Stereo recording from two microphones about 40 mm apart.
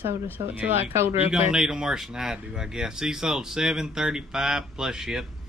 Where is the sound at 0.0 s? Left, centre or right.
Right.